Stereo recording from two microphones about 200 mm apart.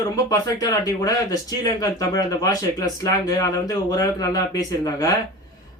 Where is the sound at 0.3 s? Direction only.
20° left (ahead or behind).